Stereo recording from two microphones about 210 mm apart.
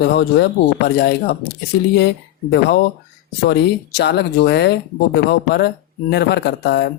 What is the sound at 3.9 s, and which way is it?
Speech, 55° left (ahead or behind).